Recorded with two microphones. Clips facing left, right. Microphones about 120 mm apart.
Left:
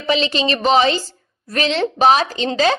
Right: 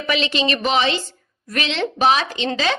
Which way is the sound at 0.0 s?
35° left (ahead or behind).